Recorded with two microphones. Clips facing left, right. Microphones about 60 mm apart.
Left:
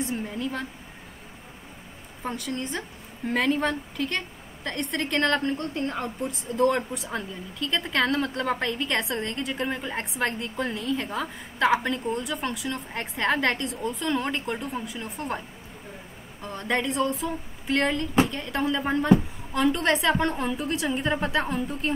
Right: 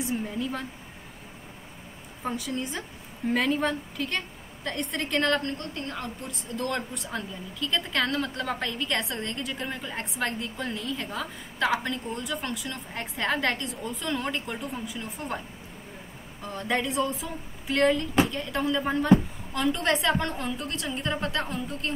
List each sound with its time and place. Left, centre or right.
0.1 s speech: centre
2.2 s speech: centre
5.4 s a woman's voice: centre
16.4 s a woman's voice: centre